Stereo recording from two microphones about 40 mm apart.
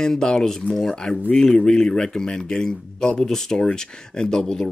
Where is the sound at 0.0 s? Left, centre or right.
Centre.